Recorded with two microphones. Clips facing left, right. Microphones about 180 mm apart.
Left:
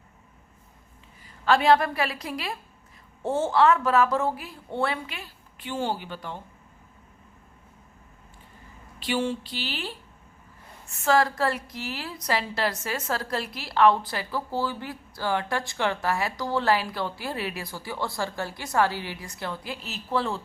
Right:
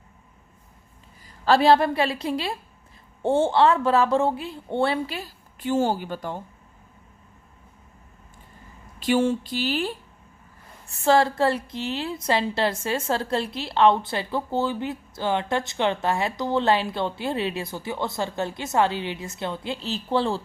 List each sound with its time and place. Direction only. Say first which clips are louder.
1.5 s a woman's voice: right 3 dB; 30° right (ahead or behind)
9.0 s speech: right 6 dB; 45° right (ahead or behind)
10.8 s a woman's voice: right 3 dB; 30° right (ahead or behind)